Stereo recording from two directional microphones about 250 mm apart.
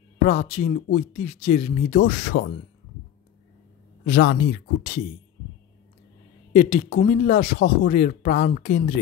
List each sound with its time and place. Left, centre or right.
0.2 s speech: left
4.0 s speech: left
6.5 s speech: left